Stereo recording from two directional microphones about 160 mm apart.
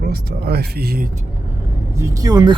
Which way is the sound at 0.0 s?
80° right.